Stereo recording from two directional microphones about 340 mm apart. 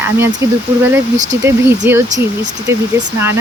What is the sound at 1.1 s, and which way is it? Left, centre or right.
Speech, right.